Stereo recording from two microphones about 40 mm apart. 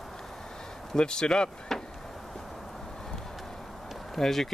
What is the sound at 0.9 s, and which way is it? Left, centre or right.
Speech, centre.